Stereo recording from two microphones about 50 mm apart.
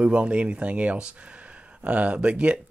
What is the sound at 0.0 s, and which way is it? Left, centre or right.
Speech, right.